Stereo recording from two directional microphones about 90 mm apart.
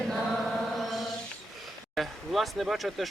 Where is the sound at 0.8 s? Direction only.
Centre (ahead or behind).